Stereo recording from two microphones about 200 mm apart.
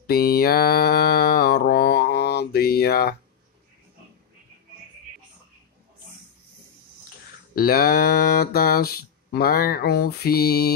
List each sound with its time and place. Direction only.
0.0 s mantra: 50° left (ahead or behind)
7.5 s speech: 50° left (ahead or behind)